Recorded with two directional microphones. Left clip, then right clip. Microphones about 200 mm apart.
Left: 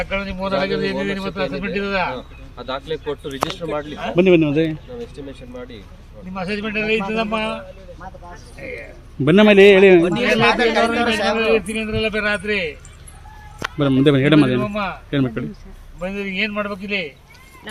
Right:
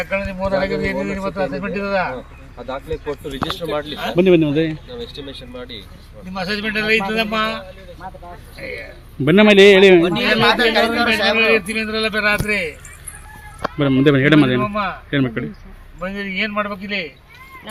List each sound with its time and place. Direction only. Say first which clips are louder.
0.3 s speech: right 1 dB; 5° left (ahead or behind)
1.0 s speech: right 1 dB; 30° left (ahead or behind)
2.1 s speech: even; 5° right (ahead or behind)
3.0 s speech: left 1 dB; 10° left (ahead or behind)
5.1 s a man's voice: right 2 dB; 10° left (ahead or behind)
6.3 s speech: right 2 dB; 20° left (ahead or behind)
9.2 s speech: right 1 dB; centre (ahead or behind)
10.2 s a man's voice: right 1 dB; 15° left (ahead or behind)
13.7 s speech: right 1 dB; 5° left (ahead or behind)
14.7 s speech: right 2 dB; 30° left (ahead or behind)
15.1 s speech: right 1 dB; centre (ahead or behind)
16.0 s a man's voice: even; 20° left (ahead or behind)